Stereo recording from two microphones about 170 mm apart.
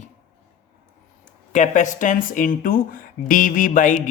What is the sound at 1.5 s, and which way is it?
Speech, 45° left (ahead or behind).